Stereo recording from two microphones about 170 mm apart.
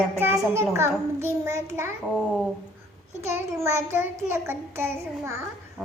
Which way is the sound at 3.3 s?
15° right (ahead or behind).